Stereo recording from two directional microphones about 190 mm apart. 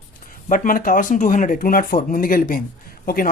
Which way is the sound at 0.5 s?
45° left (ahead or behind).